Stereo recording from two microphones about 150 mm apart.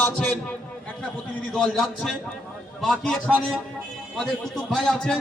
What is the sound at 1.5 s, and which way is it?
A man's voice, 5° left (ahead or behind).